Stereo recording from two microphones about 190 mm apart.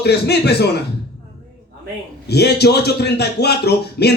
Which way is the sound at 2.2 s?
60° left (ahead or behind).